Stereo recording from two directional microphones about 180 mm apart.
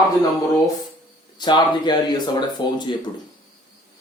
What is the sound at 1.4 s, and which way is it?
Speech, 25° left (ahead or behind).